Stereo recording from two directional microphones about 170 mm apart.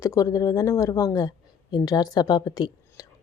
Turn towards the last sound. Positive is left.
turn(degrees=25)  # may be behind; listen again after turning